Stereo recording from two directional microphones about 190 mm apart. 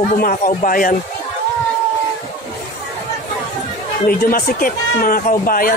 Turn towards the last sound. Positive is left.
turn(degrees=50)  # may be behind; listen again after turning